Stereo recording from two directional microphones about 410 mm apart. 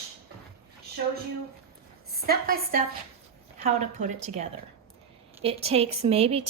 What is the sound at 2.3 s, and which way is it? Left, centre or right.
A woman's voice, right.